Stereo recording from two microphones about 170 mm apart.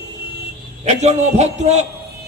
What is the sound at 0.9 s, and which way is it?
Speech, 40° right (ahead or behind).